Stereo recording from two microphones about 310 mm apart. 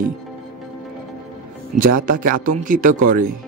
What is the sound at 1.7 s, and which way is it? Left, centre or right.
Speech, right.